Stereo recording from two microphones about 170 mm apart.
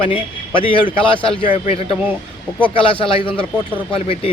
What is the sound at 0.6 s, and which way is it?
Speech, 30° left (ahead or behind).